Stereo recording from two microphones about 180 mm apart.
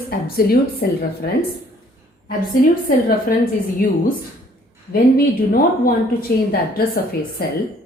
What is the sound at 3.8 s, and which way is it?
Speech, 50° left (ahead or behind).